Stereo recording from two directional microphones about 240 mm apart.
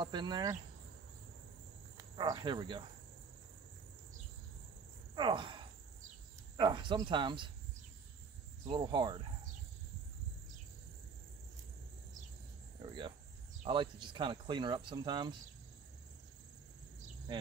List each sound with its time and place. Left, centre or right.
0.0 s speech: centre
2.0 s speech: centre
5.1 s speech: centre
8.6 s speech: centre
12.8 s cricket: centre
13.6 s speech: centre
17.3 s speech: centre